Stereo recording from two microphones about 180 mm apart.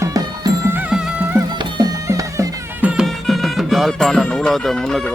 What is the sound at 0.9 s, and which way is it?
Music, 5° right (ahead or behind).